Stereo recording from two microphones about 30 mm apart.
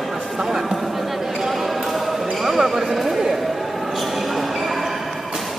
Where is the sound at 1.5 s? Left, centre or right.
Centre.